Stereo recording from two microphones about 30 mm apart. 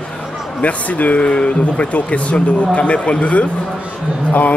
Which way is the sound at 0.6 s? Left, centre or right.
Left.